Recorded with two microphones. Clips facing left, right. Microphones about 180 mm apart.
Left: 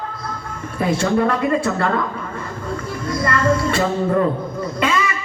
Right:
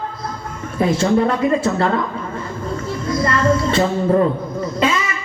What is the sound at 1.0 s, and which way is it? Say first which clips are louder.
Speech: right 1 dB; 25° right (ahead or behind).